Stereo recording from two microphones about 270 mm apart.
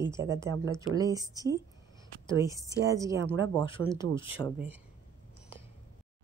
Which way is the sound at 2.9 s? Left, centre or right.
Centre.